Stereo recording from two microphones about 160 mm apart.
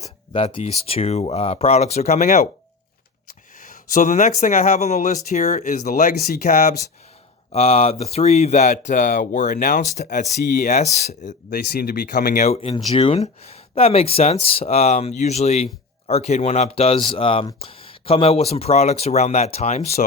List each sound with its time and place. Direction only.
0.3 s speech: 35° left (ahead or behind)
3.6 s speech: 55° left (ahead or behind)
7.5 s speech: 40° left (ahead or behind)
11.5 s speech: 75° left (ahead or behind); by 12.5 s 55° left (ahead or behind)
12.5 s speech: 35° left (ahead or behind)